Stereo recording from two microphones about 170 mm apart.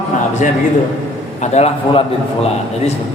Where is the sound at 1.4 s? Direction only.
40° left (ahead or behind).